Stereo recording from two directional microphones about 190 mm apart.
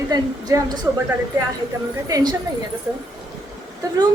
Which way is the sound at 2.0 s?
20° right (ahead or behind).